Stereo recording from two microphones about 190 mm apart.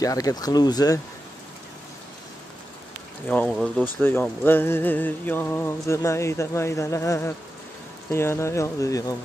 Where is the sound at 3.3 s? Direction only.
5° left (ahead or behind).